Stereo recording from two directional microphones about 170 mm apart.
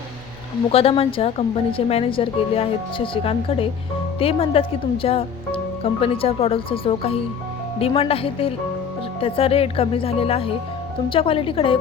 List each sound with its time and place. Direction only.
0.7 s speech: 35° left (ahead or behind)